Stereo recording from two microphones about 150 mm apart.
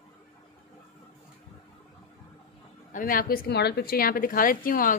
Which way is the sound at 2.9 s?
70° left (ahead or behind).